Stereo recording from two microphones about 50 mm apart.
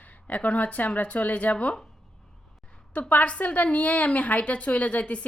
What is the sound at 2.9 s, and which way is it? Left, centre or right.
A woman's voice, left.